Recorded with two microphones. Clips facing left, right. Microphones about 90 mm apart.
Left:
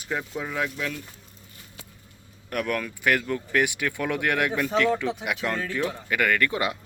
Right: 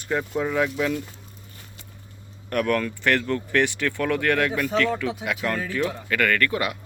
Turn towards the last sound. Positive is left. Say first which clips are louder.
# right 1 dB
turn(degrees=20)  # may be behind; listen again after turning